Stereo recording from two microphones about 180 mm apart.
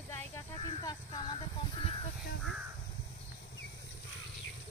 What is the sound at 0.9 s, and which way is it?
Speech, 25° left (ahead or behind).